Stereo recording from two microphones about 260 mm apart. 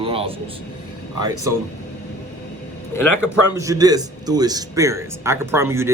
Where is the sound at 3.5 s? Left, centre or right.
Centre.